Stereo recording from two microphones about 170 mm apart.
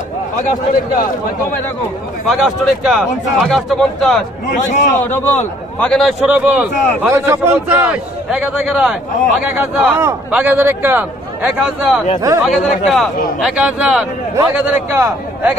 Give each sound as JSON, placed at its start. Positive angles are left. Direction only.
{"t": 2.2, "sound": "a man's voice", "side_deg": 0}
{"t": 4.6, "sound": "a man's voice", "side_deg": 45}
{"t": 5.0, "sound": "a man's voice", "side_deg": 10}
{"t": 9.9, "sound": "a man's voice", "side_deg": -15}
{"t": 14.3, "sound": "a man's voice", "side_deg": -15}